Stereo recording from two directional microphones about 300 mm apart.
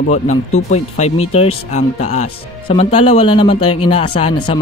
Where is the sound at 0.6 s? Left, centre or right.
Left.